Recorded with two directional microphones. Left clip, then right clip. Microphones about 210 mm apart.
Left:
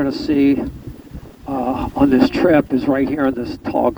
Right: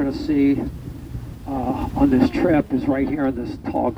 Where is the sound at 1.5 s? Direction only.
50° left (ahead or behind).